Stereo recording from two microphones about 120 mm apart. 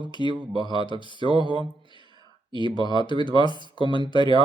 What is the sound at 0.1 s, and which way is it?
Speech, 40° left (ahead or behind).